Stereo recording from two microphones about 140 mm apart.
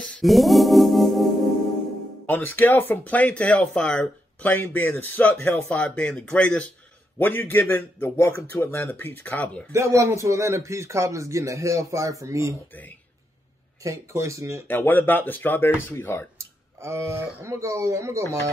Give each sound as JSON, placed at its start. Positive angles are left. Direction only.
{"t": 0.0, "sound": "music", "side_deg": 5}
{"t": 2.2, "sound": "speech", "side_deg": 15}
{"t": 9.7, "sound": "speech", "side_deg": -20}
{"t": 13.8, "sound": "speech", "side_deg": -20}
{"t": 14.7, "sound": "speech", "side_deg": 15}
{"t": 16.3, "sound": "speech", "side_deg": -20}